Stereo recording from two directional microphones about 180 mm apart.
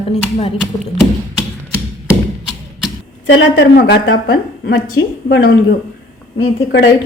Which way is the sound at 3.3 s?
65° left (ahead or behind).